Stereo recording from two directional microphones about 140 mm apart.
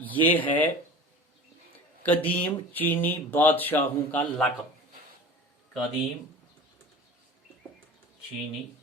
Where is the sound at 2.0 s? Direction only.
10° left (ahead or behind).